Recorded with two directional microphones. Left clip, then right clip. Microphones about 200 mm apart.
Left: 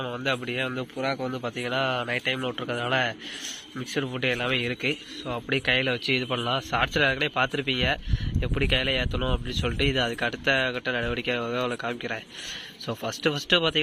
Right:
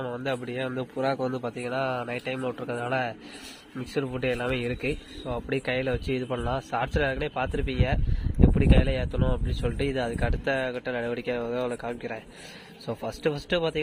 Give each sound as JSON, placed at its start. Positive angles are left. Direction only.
{"t": 0.0, "sound": "speech", "side_deg": 0}
{"t": 1.0, "sound": "speech", "side_deg": -20}
{"t": 1.4, "sound": "a man's voice", "side_deg": 0}